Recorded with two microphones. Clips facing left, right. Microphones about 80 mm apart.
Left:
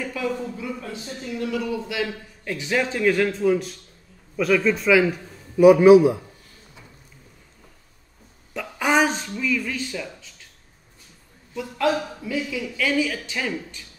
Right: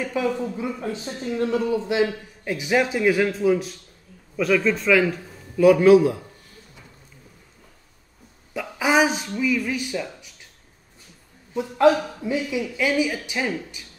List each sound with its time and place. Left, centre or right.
0.0 s speech: right
2.4 s a man's voice: centre
8.5 s a woman's voice: centre
11.5 s a man's voice: right